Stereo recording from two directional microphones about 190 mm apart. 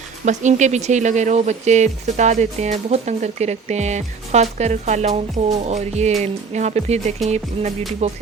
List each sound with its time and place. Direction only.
0.3 s speech: 40° right (ahead or behind)